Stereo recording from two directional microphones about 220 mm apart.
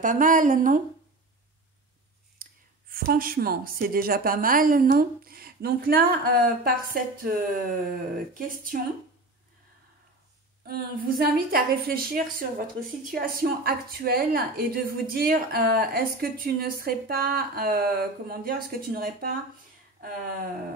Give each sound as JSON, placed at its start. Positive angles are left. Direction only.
{"t": 0.0, "sound": "a woman's voice", "side_deg": -35}
{"t": 2.4, "sound": "clicking", "side_deg": -40}
{"t": 2.9, "sound": "a woman's voice", "side_deg": -40}
{"t": 10.7, "sound": "a woman's voice", "side_deg": -45}